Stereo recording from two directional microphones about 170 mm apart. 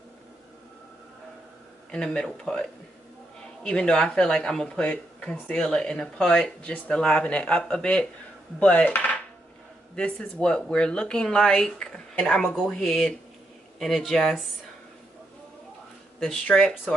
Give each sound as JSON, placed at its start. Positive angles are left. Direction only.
{"t": 1.9, "sound": "speech", "side_deg": 5}
{"t": 8.5, "sound": "a sound", "side_deg": 5}
{"t": 9.9, "sound": "speech", "side_deg": 5}
{"t": 16.2, "sound": "speech", "side_deg": 5}